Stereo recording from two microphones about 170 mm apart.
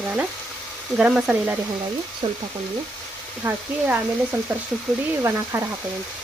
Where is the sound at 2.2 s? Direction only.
30° right (ahead or behind).